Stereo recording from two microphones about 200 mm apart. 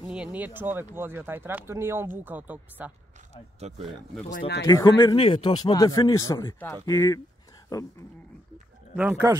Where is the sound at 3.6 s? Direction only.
35° right (ahead or behind).